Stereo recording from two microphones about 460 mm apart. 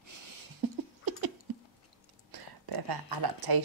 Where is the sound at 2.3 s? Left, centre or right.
Right.